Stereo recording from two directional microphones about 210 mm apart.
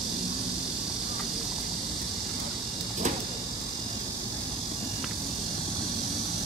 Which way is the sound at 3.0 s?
35° right (ahead or behind).